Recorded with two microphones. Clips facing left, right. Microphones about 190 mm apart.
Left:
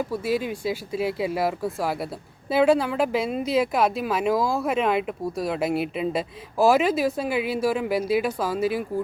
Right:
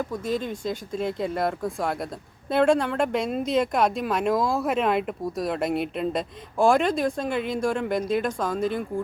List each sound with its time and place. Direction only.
0.0 s speech: 10° left (ahead or behind)